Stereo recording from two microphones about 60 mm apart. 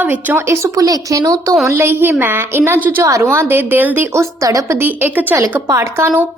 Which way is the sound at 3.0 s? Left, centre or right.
Right.